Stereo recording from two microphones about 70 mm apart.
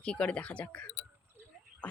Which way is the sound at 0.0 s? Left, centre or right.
Centre.